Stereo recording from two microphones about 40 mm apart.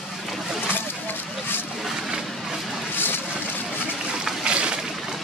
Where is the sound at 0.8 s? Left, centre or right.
Left.